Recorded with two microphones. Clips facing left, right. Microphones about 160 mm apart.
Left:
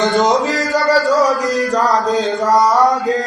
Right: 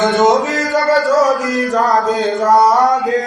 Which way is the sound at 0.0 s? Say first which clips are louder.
Right 2 dB; centre (ahead or behind).